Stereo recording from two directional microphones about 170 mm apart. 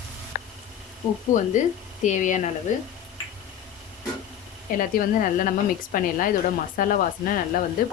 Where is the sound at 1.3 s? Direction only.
50° left (ahead or behind).